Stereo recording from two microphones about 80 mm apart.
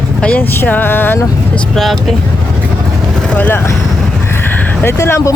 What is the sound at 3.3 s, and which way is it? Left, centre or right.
Speech, centre.